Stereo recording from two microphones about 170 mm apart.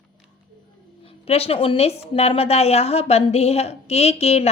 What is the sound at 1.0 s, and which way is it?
A woman's voice, 35° left (ahead or behind).